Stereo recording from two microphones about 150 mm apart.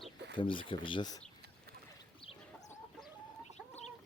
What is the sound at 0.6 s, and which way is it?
Speech, 35° left (ahead or behind).